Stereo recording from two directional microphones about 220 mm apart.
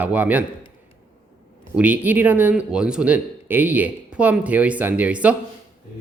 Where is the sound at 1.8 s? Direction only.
5° right (ahead or behind).